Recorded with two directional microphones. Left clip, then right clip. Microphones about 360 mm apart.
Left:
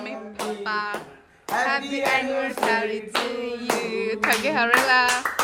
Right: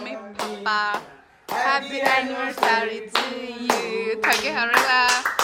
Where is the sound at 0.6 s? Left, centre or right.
Centre.